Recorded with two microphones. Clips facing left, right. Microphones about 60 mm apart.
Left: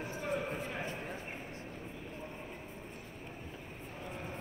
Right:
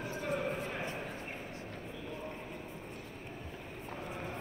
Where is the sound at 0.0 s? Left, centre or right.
Left.